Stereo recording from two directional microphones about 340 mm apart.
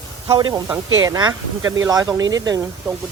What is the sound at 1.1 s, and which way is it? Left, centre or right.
Speech, centre.